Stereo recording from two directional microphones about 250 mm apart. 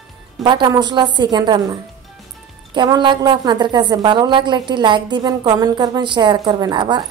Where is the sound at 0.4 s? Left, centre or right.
Centre.